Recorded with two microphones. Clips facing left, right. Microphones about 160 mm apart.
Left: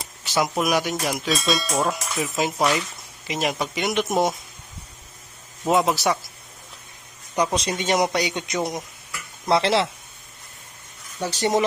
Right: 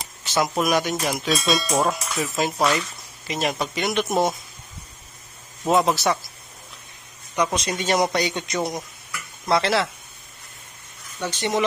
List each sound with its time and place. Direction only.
0.3 s speech: 10° left (ahead or behind)
5.6 s speech: 10° left (ahead or behind)
7.3 s speech: 30° left (ahead or behind); by 8.7 s 15° left (ahead or behind)
9.5 s speech: 25° left (ahead or behind)
11.2 s speech: 35° left (ahead or behind)